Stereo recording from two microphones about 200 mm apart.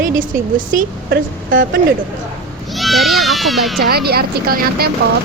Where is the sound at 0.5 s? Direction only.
40° right (ahead or behind).